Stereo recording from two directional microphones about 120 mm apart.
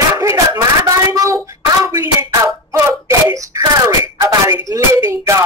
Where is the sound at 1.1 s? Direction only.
25° right (ahead or behind).